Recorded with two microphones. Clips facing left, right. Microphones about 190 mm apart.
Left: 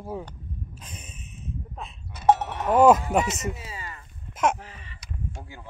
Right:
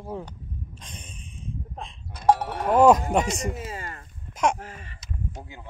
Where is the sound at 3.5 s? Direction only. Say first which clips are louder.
Right 3 dB; 50° right (ahead or behind).